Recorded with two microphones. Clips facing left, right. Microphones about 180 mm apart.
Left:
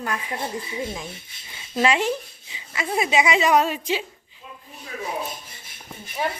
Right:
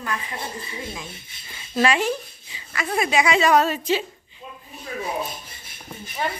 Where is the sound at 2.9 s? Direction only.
20° left (ahead or behind).